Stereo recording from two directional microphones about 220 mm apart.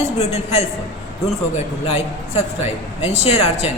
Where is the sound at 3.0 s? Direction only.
30° left (ahead or behind).